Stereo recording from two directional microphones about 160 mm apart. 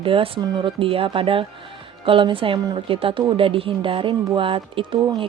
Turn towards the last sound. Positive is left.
turn(degrees=-35)  # may be behind; listen again after turning